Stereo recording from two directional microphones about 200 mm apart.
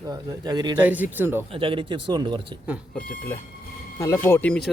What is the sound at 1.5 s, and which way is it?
Speech, 25° right (ahead or behind).